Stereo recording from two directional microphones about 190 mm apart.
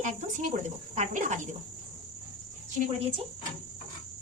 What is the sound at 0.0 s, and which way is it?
Speech, 40° right (ahead or behind).